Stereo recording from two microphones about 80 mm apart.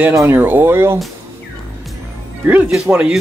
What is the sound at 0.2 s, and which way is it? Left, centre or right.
Speech, right.